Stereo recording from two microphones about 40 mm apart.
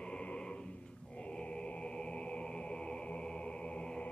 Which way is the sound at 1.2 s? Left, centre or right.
Left.